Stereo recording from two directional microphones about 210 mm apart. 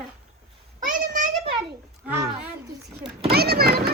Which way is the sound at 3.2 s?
50° right (ahead or behind).